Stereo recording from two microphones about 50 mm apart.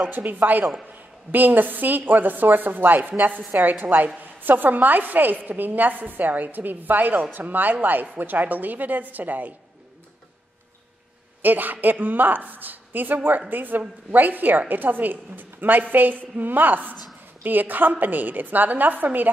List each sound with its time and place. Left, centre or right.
0.1 s a woman's voice: right
11.4 s a woman's voice: right